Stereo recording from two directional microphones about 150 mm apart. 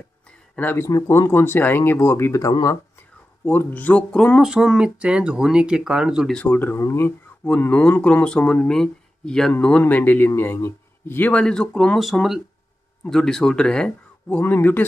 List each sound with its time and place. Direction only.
0.6 s speech: 15° left (ahead or behind); by 6.3 s 5° right (ahead or behind)
6.3 s speech: 10° left (ahead or behind)